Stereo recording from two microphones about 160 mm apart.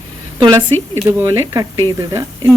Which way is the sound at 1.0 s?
15° right (ahead or behind).